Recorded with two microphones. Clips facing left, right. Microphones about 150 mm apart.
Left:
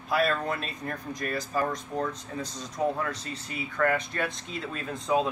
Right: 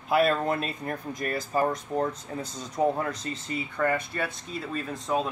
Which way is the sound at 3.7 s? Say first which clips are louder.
Left 1 dB; 15° right (ahead or behind).